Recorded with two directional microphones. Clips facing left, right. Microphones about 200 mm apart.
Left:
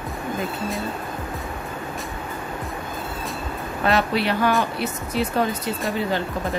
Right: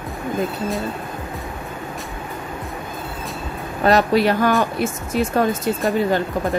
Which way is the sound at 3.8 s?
40° right (ahead or behind).